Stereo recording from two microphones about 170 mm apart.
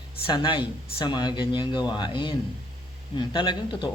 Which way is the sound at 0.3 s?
30° left (ahead or behind).